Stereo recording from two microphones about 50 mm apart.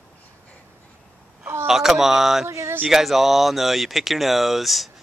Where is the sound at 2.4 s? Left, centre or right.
Right.